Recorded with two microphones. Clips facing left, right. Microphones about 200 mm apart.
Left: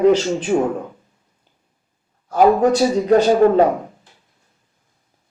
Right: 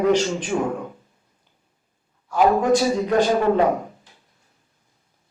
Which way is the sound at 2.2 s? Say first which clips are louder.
Left 5 dB; 40° left (ahead or behind).